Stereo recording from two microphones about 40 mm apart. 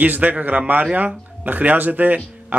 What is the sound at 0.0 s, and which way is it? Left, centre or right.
Speech, right.